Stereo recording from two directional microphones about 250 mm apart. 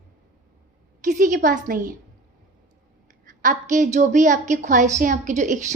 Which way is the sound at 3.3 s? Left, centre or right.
Right.